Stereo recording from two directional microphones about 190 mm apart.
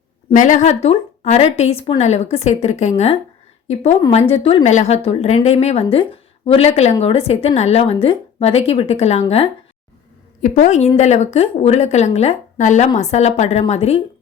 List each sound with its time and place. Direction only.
0.3 s speech: 40° left (ahead or behind)
4.1 s speech: 35° left (ahead or behind)